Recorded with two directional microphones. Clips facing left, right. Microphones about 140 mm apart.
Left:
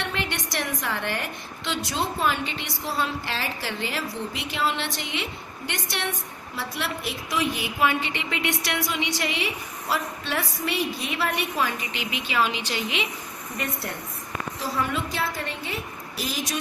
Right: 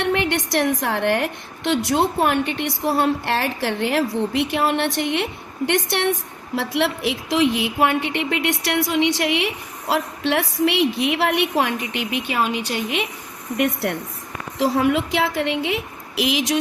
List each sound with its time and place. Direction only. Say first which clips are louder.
0.0 s a woman's voice: right 9 dB; 65° right (ahead or behind)
11.8 s speech: right 7 dB; 60° right (ahead or behind)
14.6 s a woman's voice: right 10 dB; 90° right